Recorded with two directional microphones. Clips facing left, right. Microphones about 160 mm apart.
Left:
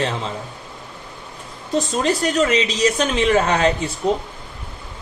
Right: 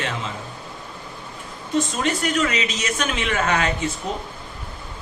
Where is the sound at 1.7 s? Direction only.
35° left (ahead or behind).